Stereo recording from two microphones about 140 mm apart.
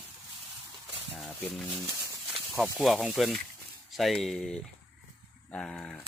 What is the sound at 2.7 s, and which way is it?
Speech, centre (ahead or behind).